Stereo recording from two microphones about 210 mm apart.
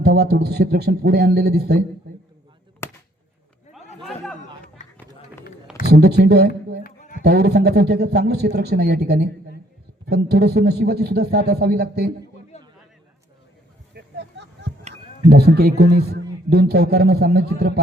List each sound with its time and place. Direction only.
0.0 s a man's voice: 50° right (ahead or behind)
2.8 s chop: 10° left (ahead or behind)
4.0 s chatter: 5° left (ahead or behind)
5.8 s a man's voice: 50° right (ahead or behind)
6.8 s a sound: 40° left (ahead or behind)
7.2 s a man's voice: 50° right (ahead or behind)
12.5 s a sound: 30° left (ahead or behind)
13.9 s a sound: 55° right (ahead or behind)
15.3 s a man's voice: 50° right (ahead or behind)